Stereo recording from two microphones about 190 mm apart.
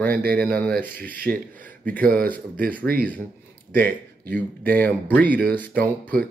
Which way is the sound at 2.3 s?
50° right (ahead or behind).